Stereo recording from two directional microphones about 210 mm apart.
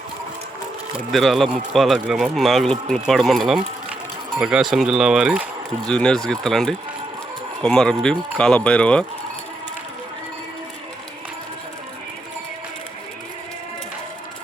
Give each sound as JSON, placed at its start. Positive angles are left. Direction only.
{"t": 0.9, "sound": "speech", "side_deg": 0}